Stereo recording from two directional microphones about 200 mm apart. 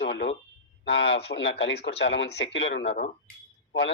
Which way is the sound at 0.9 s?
60° left (ahead or behind).